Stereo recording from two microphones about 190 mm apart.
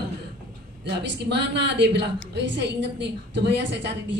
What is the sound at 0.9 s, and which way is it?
A woman's voice, 65° right (ahead or behind).